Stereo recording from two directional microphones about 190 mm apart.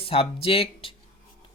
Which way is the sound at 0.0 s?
30° left (ahead or behind).